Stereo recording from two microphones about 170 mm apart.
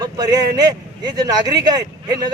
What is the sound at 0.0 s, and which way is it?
Speech, 25° right (ahead or behind).